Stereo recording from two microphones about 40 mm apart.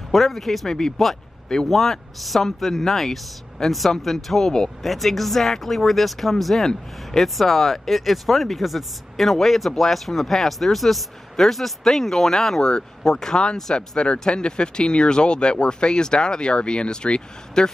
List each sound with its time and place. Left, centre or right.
0.1 s speech: centre; by 17.6 s left